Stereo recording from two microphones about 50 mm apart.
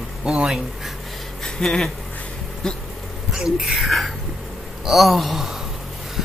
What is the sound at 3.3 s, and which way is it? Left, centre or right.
Speech, centre.